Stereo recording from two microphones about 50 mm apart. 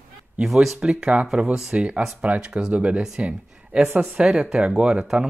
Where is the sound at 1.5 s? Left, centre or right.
Centre.